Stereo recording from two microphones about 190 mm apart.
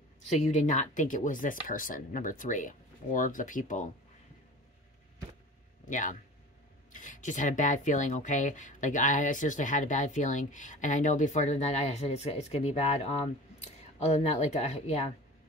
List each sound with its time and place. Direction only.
0.3 s speech: 40° left (ahead or behind)
5.9 s speech: 45° left (ahead or behind)